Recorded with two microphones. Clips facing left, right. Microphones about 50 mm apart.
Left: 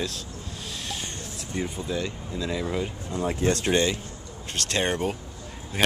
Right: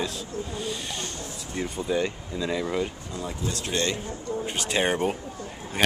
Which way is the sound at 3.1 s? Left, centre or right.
Left.